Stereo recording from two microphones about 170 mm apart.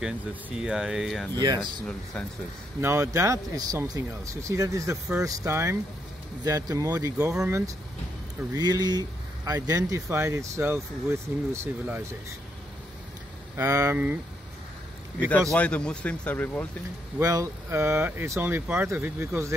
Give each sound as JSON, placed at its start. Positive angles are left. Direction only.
{"t": 0.6, "sound": "speech", "side_deg": -5}
{"t": 2.8, "sound": "speech", "side_deg": -15}
{"t": 13.6, "sound": "speech", "side_deg": -20}
{"t": 15.5, "sound": "speech", "side_deg": 5}
{"t": 17.2, "sound": "speech", "side_deg": -20}